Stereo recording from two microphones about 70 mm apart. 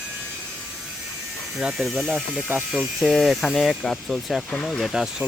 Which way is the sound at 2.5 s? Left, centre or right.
Right.